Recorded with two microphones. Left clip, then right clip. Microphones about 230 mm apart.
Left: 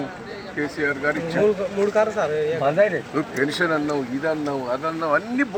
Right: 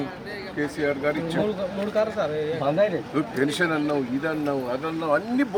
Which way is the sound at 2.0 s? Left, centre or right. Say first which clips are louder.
Left 2 dB; centre.